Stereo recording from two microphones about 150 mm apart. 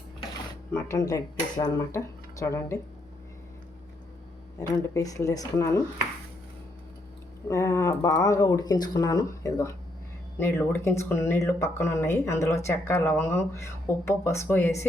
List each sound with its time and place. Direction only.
0.7 s speech: 15° left (ahead or behind)
4.7 s speech: 20° left (ahead or behind)
7.4 s speech: 20° left (ahead or behind)